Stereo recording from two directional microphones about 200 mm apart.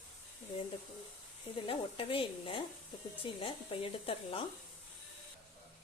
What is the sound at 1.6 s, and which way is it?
Speech, 25° left (ahead or behind).